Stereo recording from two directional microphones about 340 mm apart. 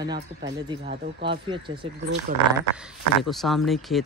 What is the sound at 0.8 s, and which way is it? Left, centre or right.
Speech, right.